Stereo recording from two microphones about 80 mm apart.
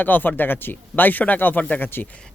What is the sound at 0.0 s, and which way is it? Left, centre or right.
Speech, left.